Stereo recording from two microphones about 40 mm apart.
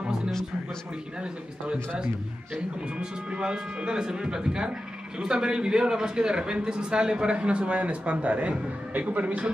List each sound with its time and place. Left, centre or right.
3.0 s a man's voice: right